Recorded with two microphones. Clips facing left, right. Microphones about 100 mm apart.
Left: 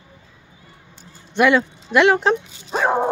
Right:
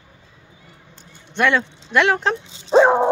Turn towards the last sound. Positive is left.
turn(degrees=-25)  # may be behind; listen again after turning